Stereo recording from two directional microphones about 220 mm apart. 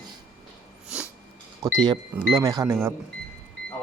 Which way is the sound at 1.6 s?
15° right (ahead or behind).